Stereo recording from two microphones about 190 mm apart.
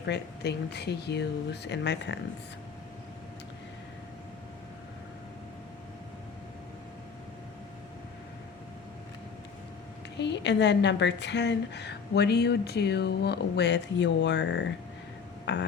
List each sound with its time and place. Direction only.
0.0 s a woman's voice: 60° left (ahead or behind)
10.2 s a woman's voice: 65° left (ahead or behind)
15.5 s music: 70° left (ahead or behind)